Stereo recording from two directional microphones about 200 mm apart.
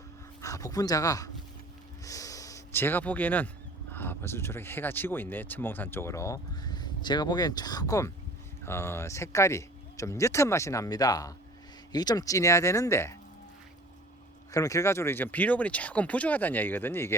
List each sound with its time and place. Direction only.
0.4 s speech: 15° left (ahead or behind)
2.0 s gasp: 15° left (ahead or behind)
3.9 s speech: 10° left (ahead or behind)
14.5 s speech: 15° left (ahead or behind)